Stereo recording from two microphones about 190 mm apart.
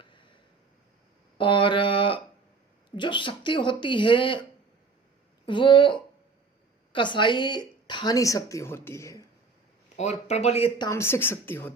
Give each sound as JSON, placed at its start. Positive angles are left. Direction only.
{"t": 0.0, "sound": "a sound", "side_deg": 25}
{"t": 1.4, "sound": "a sound", "side_deg": 25}
{"t": 2.9, "sound": "a woman's voice", "side_deg": 25}
{"t": 5.5, "sound": "a woman's voice", "side_deg": 25}
{"t": 10.0, "sound": "speech", "side_deg": 35}
{"t": 10.8, "sound": "speech", "side_deg": 15}